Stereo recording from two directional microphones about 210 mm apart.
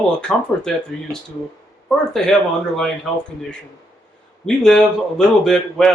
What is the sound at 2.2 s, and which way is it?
Speech, centre (ahead or behind).